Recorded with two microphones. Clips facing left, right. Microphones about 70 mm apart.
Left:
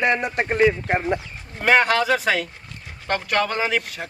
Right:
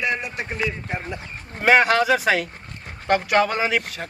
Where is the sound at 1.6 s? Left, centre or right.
Centre.